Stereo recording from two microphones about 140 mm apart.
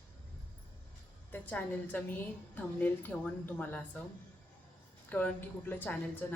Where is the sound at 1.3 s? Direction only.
10° left (ahead or behind).